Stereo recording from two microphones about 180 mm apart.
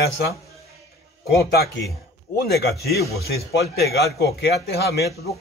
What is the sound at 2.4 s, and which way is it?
Speech, 60° left (ahead or behind).